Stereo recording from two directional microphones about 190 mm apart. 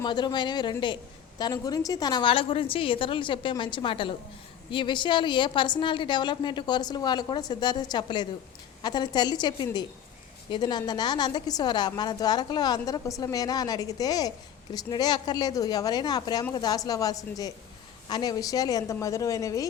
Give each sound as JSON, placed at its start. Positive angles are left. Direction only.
{"t": 0.0, "sound": "a woman's voice", "side_deg": 20}